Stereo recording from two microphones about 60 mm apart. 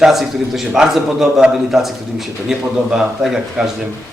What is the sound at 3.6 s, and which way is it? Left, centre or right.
Speech, centre.